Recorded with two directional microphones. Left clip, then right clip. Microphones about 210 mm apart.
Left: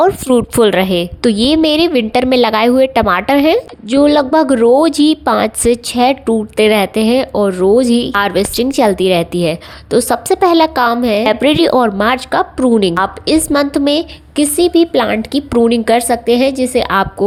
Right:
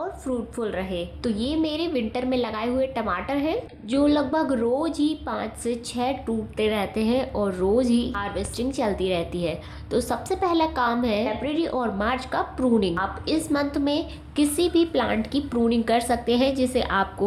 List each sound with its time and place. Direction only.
0.0 s a woman's voice: 50° left (ahead or behind)